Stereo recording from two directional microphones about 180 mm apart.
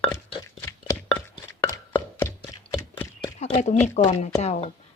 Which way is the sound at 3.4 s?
40° left (ahead or behind).